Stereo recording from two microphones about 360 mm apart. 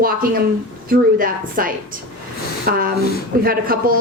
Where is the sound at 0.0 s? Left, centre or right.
Right.